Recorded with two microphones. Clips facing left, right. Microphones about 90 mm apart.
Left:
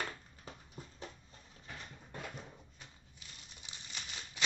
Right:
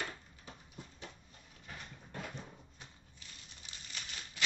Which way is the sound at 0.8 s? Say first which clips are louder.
Right 1 dB; 40° left (ahead or behind).